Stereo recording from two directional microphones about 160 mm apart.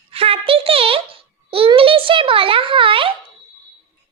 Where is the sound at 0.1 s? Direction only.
35° right (ahead or behind).